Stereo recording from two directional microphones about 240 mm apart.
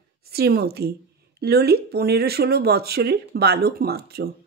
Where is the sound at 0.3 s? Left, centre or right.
Right.